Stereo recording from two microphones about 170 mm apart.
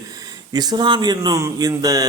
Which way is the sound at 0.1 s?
20° right (ahead or behind).